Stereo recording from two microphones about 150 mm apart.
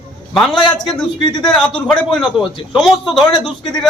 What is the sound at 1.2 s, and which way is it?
Speech, 30° left (ahead or behind).